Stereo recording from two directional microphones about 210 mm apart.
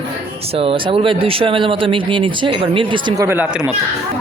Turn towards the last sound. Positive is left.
turn(degrees=-5)  # may be behind; listen again after turning